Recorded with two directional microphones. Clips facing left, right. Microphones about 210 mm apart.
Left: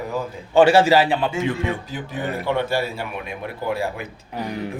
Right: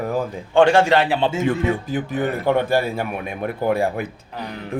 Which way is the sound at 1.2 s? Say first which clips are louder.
Right 3 dB; 25° right (ahead or behind).